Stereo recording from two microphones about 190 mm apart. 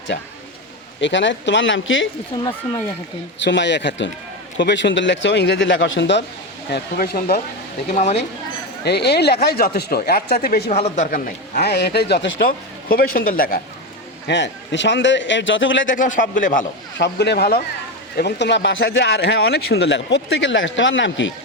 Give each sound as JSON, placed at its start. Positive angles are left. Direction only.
{"t": 0.1, "sound": "speech", "side_deg": 65}
{"t": 2.4, "sound": "speech", "side_deg": 20}
{"t": 3.4, "sound": "speech", "side_deg": 70}
{"t": 6.7, "sound": "speech", "side_deg": 55}
{"t": 7.9, "sound": "a man's voice", "side_deg": 35}
{"t": 8.8, "sound": "speech", "side_deg": 60}
{"t": 10.7, "sound": "a man's voice", "side_deg": 35}
{"t": 11.6, "sound": "speech", "side_deg": 60}
{"t": 12.4, "sound": "speech", "side_deg": 50}
{"t": 14.3, "sound": "speech", "side_deg": 70}
{"t": 16.0, "sound": "speech", "side_deg": 45}
{"t": 17.0, "sound": "speech", "side_deg": 60}